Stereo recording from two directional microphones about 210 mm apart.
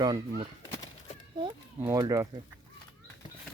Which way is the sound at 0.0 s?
20° right (ahead or behind).